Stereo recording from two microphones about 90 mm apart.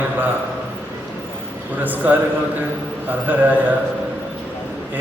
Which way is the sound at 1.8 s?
20° right (ahead or behind).